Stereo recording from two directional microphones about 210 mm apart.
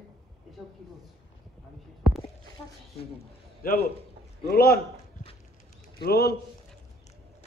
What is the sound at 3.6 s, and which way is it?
A man's voice, 45° left (ahead or behind).